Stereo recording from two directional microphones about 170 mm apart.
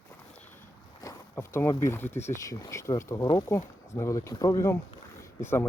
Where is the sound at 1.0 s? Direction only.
15° left (ahead or behind).